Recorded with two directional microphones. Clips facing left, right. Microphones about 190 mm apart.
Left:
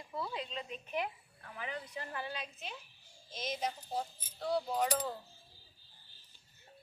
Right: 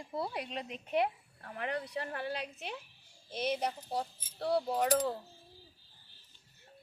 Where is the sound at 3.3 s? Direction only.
65° right (ahead or behind).